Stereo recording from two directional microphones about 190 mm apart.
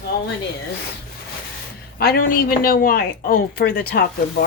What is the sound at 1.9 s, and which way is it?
Speech, 50° left (ahead or behind).